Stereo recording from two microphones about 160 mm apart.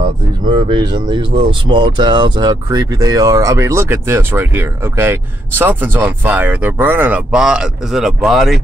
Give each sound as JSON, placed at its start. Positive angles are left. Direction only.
{"t": 0.5, "sound": "speech", "side_deg": -30}